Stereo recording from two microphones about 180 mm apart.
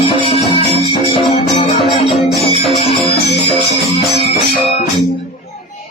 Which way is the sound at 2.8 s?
30° left (ahead or behind).